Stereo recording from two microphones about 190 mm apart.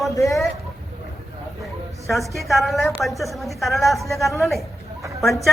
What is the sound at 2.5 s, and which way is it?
Speech, centre (ahead or behind).